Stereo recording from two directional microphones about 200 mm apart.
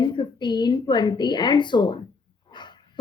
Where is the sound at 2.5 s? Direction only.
20° left (ahead or behind).